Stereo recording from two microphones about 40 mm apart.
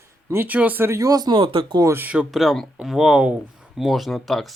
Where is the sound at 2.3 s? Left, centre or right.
Centre.